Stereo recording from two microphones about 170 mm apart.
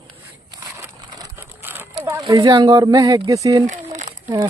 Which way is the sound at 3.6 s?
45° right (ahead or behind).